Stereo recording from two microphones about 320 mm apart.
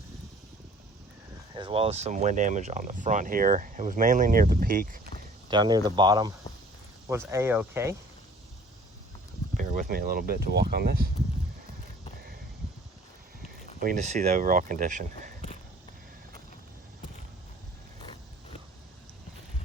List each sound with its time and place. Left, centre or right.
1.5 s speech: centre
5.5 s speech: centre
9.6 s speech: right
13.7 s speech: right